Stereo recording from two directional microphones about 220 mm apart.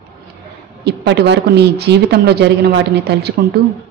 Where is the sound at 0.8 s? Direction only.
50° right (ahead or behind).